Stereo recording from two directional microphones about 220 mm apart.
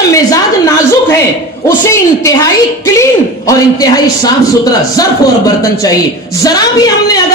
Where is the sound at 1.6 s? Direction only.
15° left (ahead or behind).